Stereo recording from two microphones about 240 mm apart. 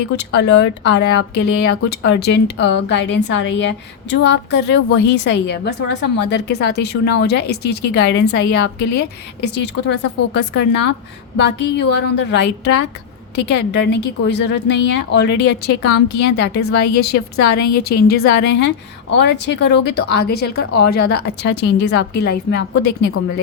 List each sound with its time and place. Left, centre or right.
0.2 s a woman's voice: left